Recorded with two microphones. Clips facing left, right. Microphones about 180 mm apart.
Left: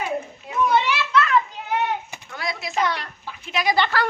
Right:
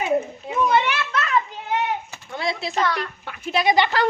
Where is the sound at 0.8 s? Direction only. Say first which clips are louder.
Left 2 dB; 55° right (ahead or behind).